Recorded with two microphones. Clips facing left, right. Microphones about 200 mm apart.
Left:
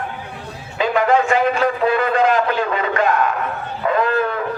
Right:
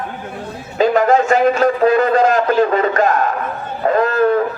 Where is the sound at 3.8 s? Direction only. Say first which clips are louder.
Right 3 dB; 40° right (ahead or behind).